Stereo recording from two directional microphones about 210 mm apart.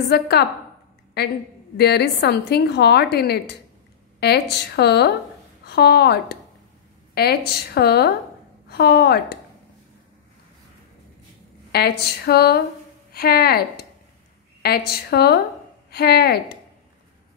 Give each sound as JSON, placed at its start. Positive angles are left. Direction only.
{"t": 0.1, "sound": "a woman's voice", "side_deg": 50}
{"t": 11.7, "sound": "a woman's voice", "side_deg": 50}
{"t": 14.9, "sound": "a woman's voice", "side_deg": 50}